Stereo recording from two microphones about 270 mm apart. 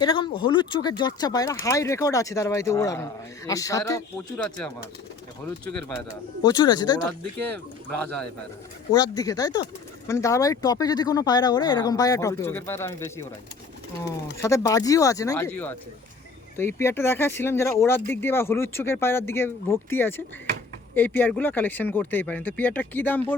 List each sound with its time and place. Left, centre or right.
0.0 s speech: centre
6.4 s speech: centre
14.3 s speech: centre